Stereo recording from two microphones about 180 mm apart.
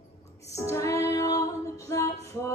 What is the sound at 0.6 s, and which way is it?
Music, 15° left (ahead or behind).